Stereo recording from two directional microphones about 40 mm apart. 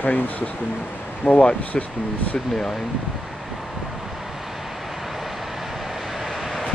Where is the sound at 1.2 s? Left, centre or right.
Left.